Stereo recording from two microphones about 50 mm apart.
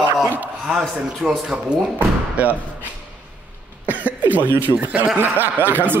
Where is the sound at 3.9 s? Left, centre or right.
Right.